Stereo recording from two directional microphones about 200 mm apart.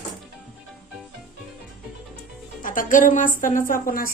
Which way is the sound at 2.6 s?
40° left (ahead or behind).